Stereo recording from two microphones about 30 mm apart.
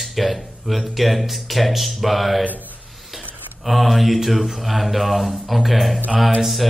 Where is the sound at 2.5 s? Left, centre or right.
Right.